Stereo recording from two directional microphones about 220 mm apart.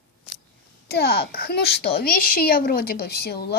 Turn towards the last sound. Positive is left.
turn(degrees=45)  # may be behind; listen again after turning